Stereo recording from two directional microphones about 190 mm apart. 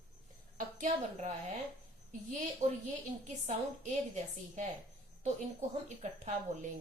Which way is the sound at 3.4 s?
40° right (ahead or behind).